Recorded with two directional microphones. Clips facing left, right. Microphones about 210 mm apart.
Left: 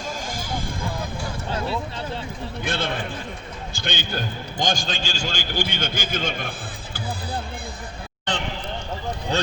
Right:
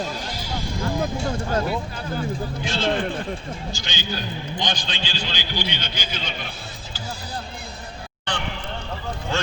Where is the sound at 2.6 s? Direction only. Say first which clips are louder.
Right 4 dB; 55° left (ahead or behind).